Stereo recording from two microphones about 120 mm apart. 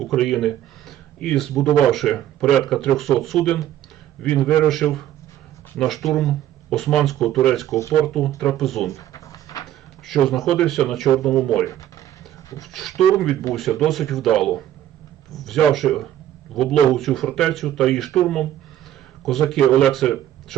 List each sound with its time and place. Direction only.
0.0 s a man's voice: centre (ahead or behind)
8.9 s a sound: 25° left (ahead or behind)
10.1 s speech: centre (ahead or behind)
12.7 s speech: centre (ahead or behind)